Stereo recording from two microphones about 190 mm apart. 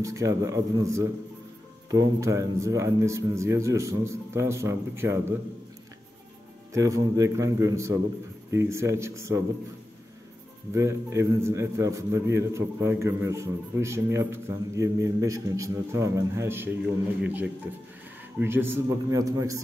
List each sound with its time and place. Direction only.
0.0 s a man's voice: 15° right (ahead or behind)
6.7 s a man's voice: 15° right (ahead or behind)
10.7 s a man's voice: 15° right (ahead or behind)